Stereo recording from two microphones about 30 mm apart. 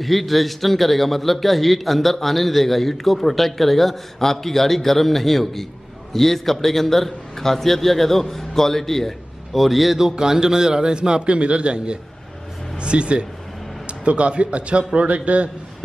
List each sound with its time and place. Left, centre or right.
0.0 s a man's voice: centre
9.6 s a man's voice: centre
9.9 s a man's voice: centre; by 15.5 s right